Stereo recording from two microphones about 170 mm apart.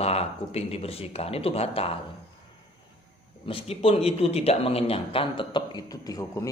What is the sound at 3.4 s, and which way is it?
A man's voice, 35° left (ahead or behind).